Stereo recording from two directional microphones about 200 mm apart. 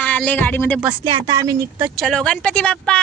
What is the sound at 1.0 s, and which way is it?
Speech, 20° right (ahead or behind).